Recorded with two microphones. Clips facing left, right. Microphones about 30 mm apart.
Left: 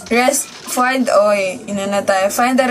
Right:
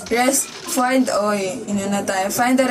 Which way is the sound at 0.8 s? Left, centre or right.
Left.